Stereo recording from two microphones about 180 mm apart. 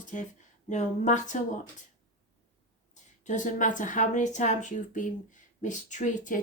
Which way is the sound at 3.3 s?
45° left (ahead or behind).